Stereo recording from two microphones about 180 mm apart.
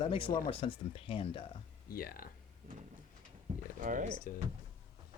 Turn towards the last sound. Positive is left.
turn(degrees=50)  # may be behind; listen again after turning